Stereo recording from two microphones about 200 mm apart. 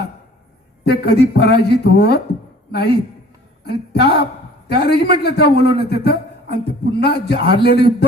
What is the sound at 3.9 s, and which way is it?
A man's voice, 55° left (ahead or behind).